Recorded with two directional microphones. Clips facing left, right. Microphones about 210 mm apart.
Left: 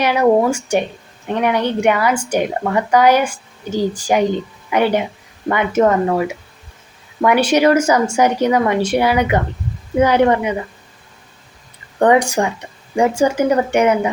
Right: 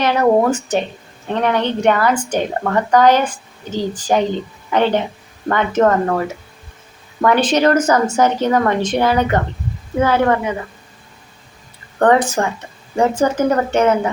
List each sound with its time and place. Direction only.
0.0 s a woman's voice: 10° left (ahead or behind)
11.9 s a woman's voice: 10° left (ahead or behind)